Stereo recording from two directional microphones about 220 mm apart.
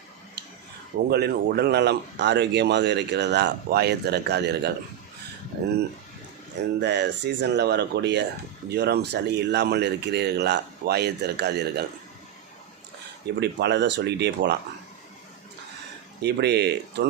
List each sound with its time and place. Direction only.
1.1 s speech: 45° right (ahead or behind)
6.8 s speech: 50° right (ahead or behind)
13.4 s speech: 50° right (ahead or behind)
16.2 s speech: 50° right (ahead or behind)